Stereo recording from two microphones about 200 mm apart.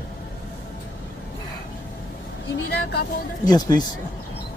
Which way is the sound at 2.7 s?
55° left (ahead or behind).